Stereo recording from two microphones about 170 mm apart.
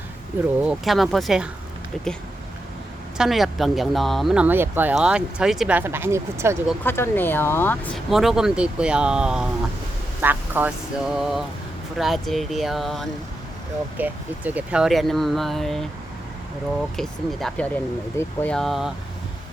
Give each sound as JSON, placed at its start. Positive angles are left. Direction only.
{"t": 0.6, "sound": "speech", "side_deg": -5}
{"t": 3.2, "sound": "speech", "side_deg": 0}
{"t": 6.8, "sound": "speech", "side_deg": 15}
{"t": 7.9, "sound": "speech", "side_deg": 0}
{"t": 17.0, "sound": "speech", "side_deg": 0}